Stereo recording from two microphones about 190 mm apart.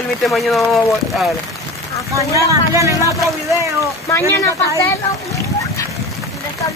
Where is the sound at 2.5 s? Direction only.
15° right (ahead or behind).